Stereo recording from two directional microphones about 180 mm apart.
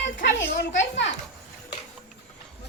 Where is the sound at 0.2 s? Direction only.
80° left.